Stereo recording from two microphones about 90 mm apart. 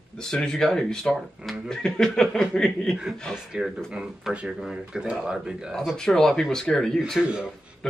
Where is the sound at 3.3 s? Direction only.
10° right (ahead or behind).